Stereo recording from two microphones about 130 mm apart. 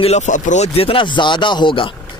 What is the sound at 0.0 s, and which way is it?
Speech, 60° left (ahead or behind).